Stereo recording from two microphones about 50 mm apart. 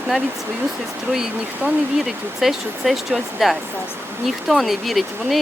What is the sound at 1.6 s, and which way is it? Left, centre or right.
Speech, right.